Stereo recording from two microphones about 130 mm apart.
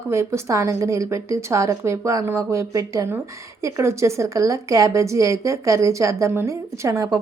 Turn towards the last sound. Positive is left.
turn(degrees=-25)  # may be behind; listen again after turning